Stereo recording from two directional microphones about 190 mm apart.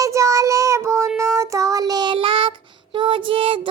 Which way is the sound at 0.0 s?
15° right (ahead or behind).